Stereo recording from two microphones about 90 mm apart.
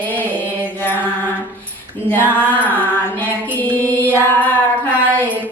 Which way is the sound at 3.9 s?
20° left (ahead or behind).